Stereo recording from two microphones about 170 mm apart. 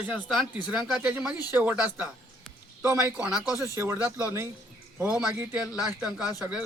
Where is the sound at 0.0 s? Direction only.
5° right (ahead or behind).